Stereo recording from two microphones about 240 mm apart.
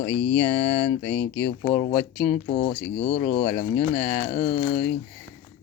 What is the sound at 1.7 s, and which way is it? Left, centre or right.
Speech, left.